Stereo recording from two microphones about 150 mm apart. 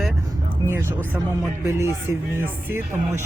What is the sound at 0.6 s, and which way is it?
Speech, 15° right (ahead or behind).